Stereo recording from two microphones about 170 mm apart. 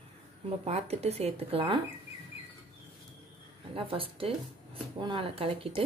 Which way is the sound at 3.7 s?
35° right (ahead or behind).